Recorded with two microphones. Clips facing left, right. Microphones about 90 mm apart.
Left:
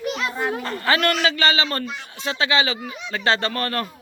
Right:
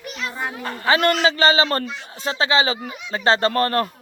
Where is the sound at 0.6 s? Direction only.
15° right (ahead or behind); by 3.8 s 35° right (ahead or behind).